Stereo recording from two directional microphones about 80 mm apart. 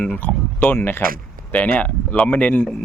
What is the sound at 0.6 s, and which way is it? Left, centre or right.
Speech, left.